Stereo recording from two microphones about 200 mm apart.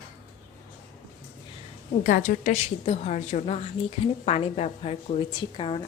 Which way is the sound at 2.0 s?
40° left (ahead or behind).